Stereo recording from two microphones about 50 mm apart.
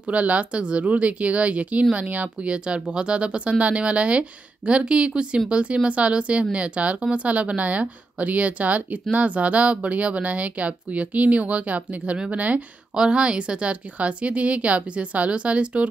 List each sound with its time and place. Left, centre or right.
0.0 s speech: right
12.9 s speech: centre